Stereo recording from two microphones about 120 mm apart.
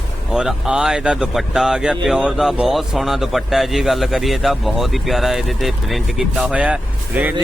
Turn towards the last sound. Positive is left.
turn(degrees=-15)  # may be behind; listen again after turning